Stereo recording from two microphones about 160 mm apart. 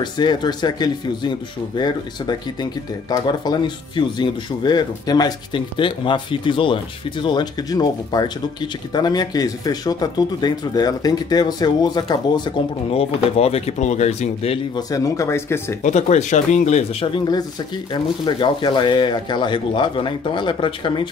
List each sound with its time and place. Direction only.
0.0 s speech: 25° left (ahead or behind)
12.9 s speech: 40° left (ahead or behind)
14.9 s speech: 20° left (ahead or behind)
15.8 s speech: 45° left (ahead or behind)
17.1 s speech: 25° left (ahead or behind)